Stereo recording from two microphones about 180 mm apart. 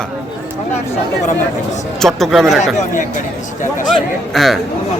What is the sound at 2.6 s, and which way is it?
Speech, 40° left (ahead or behind).